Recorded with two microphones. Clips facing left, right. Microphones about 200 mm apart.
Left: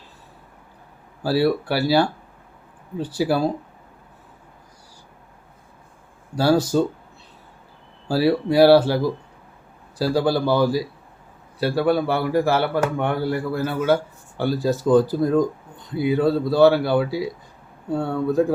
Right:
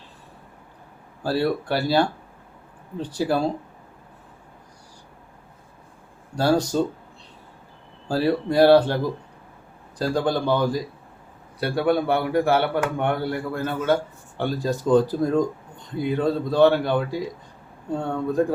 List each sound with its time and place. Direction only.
1.2 s speech: 5° left (ahead or behind)
6.3 s speech: 5° left (ahead or behind)
8.0 s speech: 5° left (ahead or behind)